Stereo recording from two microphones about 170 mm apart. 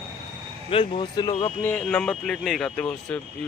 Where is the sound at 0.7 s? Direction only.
30° left (ahead or behind).